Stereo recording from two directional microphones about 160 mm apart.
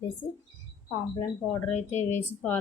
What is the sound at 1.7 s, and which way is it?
Speech, 45° left (ahead or behind).